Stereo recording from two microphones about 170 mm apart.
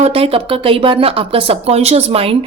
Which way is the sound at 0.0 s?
35° right (ahead or behind).